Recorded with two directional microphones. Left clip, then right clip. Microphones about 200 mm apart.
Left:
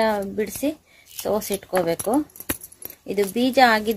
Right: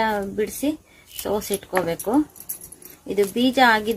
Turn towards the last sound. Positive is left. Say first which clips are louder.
# even
turn(degrees=50)  # may be behind; listen again after turning